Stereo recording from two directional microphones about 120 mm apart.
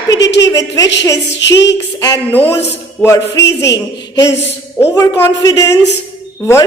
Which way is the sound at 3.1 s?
30° left (ahead or behind).